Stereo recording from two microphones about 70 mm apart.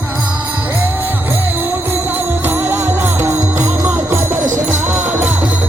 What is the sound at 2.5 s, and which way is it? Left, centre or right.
Music, right.